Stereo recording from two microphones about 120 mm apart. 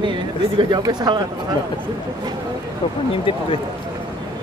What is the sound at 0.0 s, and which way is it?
Speech, 40° right (ahead or behind).